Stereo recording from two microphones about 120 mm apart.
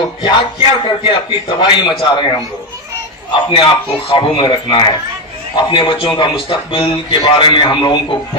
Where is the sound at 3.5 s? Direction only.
45° left (ahead or behind).